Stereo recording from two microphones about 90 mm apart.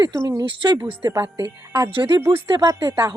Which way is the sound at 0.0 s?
40° right (ahead or behind).